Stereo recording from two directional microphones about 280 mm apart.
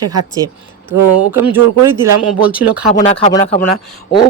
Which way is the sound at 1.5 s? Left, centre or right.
Centre.